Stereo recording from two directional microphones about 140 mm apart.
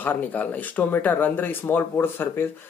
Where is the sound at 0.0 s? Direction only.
10° left (ahead or behind).